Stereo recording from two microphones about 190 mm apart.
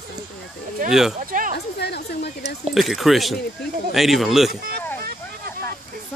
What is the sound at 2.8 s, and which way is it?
Speech, centre (ahead or behind).